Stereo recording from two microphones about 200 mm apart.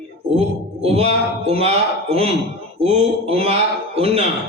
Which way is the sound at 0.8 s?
30° right (ahead or behind).